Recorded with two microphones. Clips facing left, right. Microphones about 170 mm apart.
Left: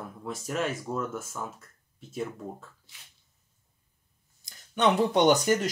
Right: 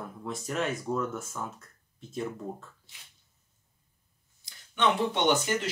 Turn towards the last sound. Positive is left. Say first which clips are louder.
# left 4 dB
turn(degrees=40)  # may be behind; listen again after turning